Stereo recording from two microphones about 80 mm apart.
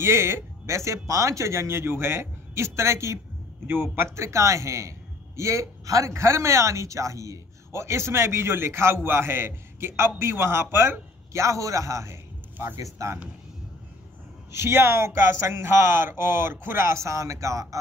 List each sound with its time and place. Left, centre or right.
0.0 s a man's voice: right
12.5 s speech: right
14.5 s a man's voice: right